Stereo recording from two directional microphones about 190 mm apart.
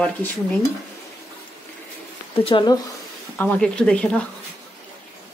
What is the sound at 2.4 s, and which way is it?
Speech, 25° left (ahead or behind).